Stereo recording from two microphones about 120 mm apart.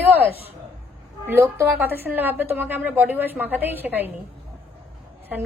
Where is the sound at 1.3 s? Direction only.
20° right (ahead or behind).